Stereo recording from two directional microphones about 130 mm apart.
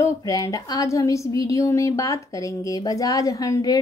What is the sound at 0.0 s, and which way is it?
A woman's voice, 25° left (ahead or behind).